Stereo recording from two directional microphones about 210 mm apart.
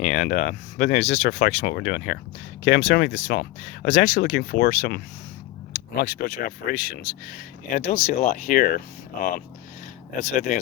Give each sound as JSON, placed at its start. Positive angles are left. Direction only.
{"t": 0.0, "sound": "speech", "side_deg": 35}
{"t": 4.4, "sound": "speech", "side_deg": 55}
{"t": 5.7, "sound": "speech", "side_deg": 40}
{"t": 10.2, "sound": "speech", "side_deg": 35}